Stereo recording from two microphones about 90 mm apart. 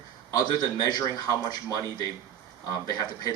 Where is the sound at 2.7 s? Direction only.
40° left (ahead or behind).